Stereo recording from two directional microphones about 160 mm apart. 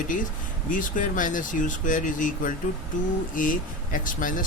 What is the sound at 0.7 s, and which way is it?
Speech, 55° left (ahead or behind).